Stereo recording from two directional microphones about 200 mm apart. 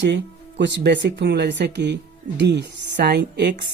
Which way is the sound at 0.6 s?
60° right (ahead or behind).